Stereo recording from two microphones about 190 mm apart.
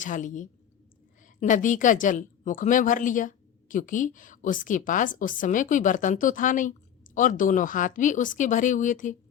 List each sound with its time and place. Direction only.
0.0 s speech: 40° left (ahead or behind)